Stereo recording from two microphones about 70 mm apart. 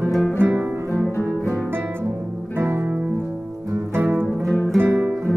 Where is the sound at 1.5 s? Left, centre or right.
Right.